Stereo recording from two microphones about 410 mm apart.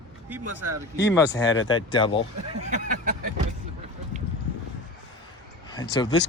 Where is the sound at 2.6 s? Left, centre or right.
Centre.